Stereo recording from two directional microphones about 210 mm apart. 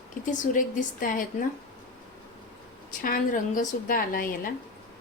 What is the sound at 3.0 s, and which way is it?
A woman's voice, 40° left (ahead or behind).